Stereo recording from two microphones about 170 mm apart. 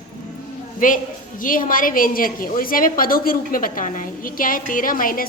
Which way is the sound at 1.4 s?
50° left (ahead or behind).